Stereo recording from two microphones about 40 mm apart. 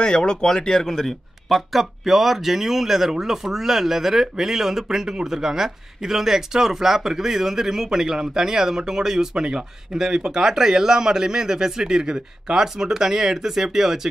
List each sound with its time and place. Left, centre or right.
0.0 s speech: left
0.9 s speech: centre